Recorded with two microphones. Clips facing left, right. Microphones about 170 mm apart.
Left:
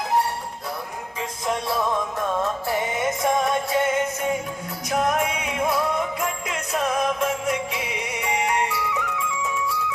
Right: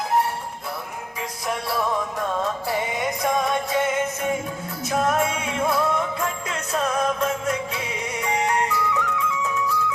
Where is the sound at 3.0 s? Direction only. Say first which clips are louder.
Left 2 dB; 20° left (ahead or behind).